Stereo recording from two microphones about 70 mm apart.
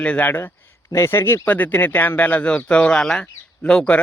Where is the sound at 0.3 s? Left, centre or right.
Left.